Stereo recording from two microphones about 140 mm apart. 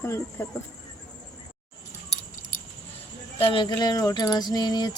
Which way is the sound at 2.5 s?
70° left (ahead or behind).